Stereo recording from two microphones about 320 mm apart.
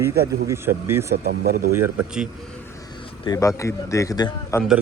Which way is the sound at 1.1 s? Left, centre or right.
Right.